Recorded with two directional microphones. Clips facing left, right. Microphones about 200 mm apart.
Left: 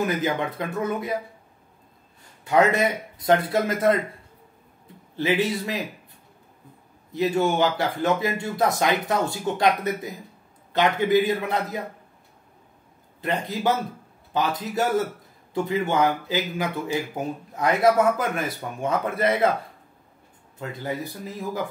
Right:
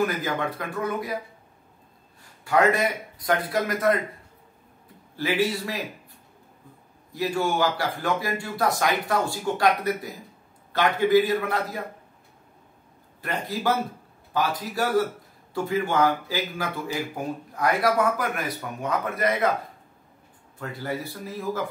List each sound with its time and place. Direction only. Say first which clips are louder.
0.0 s speech: left 1 dB; 20° left (ahead or behind)
2.4 s speech: left 2 dB; 20° left (ahead or behind)
5.1 s speech: left 2 dB; 20° left (ahead or behind)
7.1 s speech: left 3 dB; 20° left (ahead or behind)
13.2 s speech: left 3 dB; 20° left (ahead or behind)
20.5 s speech: left 1 dB; 20° left (ahead or behind)